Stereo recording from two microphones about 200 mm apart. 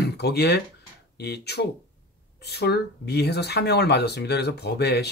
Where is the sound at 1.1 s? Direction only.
55° left (ahead or behind).